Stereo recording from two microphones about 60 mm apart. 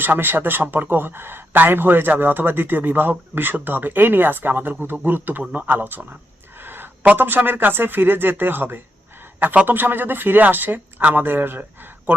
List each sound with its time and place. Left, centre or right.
0.0 s speech: right
5.4 s speech: right
5.6 s speech: right
6.6 s a sound: right
7.1 s speech: right